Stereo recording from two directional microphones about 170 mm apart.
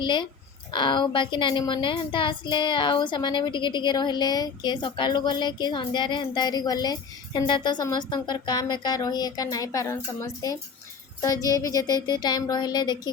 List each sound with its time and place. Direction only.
0.0 s a woman's voice: 25° left (ahead or behind)